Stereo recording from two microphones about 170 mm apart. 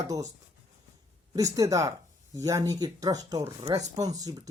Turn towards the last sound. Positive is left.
turn(degrees=-20)  # may be behind; listen again after turning